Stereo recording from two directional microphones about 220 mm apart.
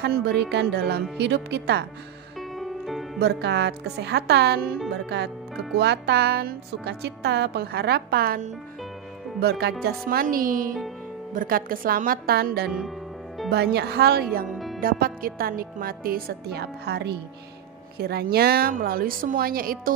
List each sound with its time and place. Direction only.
0.0 s a woman's voice: 50° right (ahead or behind)
2.6 s music: centre (ahead or behind)
3.2 s a woman's voice: 50° right (ahead or behind)
5.8 s a woman's voice: 50° right (ahead or behind)
14.5 s music: centre (ahead or behind)
14.8 s a woman's voice: 40° right (ahead or behind)